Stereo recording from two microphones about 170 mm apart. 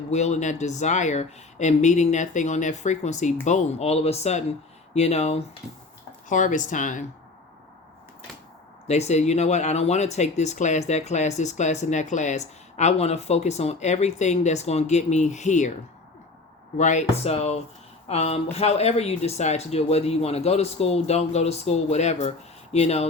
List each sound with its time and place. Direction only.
0.1 s speech: 40° left (ahead or behind)
8.9 s speech: 40° left (ahead or behind)
16.7 s speech: 45° left (ahead or behind)